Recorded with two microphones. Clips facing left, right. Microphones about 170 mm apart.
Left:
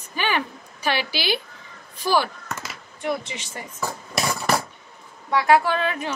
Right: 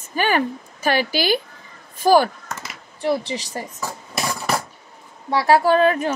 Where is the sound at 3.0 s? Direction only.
35° right (ahead or behind).